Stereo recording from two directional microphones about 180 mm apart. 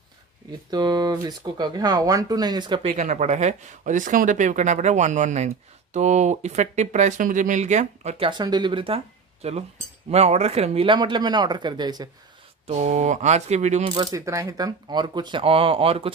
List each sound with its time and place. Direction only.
0.7 s speech: 25° right (ahead or behind)
2.9 s speech: 40° right (ahead or behind)
8.3 s speech: 25° right (ahead or behind)
12.6 s speech: 40° right (ahead or behind)
13.9 s speech: 20° right (ahead or behind)